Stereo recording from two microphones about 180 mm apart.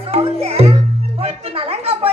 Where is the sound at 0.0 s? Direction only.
35° right (ahead or behind).